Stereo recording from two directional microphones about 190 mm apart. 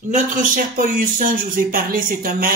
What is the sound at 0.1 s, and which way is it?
A man's voice, 45° right (ahead or behind).